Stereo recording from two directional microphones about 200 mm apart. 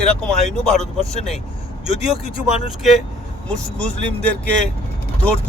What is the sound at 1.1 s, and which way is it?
Speech, 30° left (ahead or behind).